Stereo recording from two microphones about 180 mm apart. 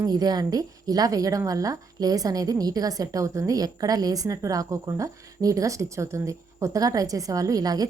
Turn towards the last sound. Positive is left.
turn(degrees=-20)  # may be behind; listen again after turning